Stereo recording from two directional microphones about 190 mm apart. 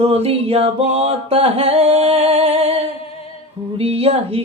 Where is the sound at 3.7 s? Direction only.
30° right (ahead or behind).